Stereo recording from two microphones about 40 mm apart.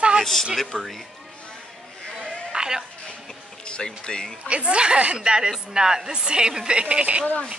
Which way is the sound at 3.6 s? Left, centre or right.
Left.